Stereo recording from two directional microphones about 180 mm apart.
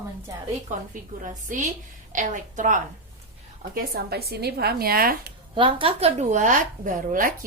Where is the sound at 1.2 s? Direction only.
45° right (ahead or behind).